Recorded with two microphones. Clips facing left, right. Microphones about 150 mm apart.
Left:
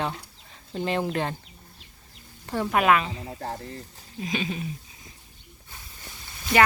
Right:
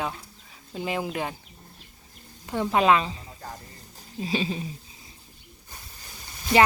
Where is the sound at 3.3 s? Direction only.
60° left (ahead or behind).